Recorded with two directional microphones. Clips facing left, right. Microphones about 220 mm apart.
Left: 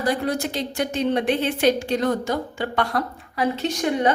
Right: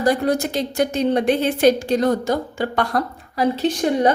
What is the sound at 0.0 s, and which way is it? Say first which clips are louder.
A woman's voice: right 5 dB; 45° right (ahead or behind).